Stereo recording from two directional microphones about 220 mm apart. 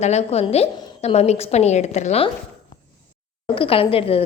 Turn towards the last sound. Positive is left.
turn(degrees=25)  # may be behind; listen again after turning